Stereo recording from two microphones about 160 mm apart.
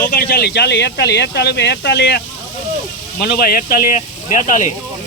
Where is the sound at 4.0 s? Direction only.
50° left (ahead or behind).